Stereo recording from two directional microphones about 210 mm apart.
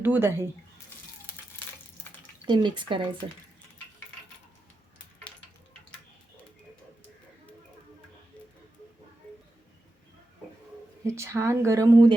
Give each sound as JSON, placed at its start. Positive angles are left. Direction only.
{"t": 0.0, "sound": "speech", "side_deg": -10}
{"t": 2.5, "sound": "speech", "side_deg": -20}
{"t": 11.0, "sound": "speech", "side_deg": -15}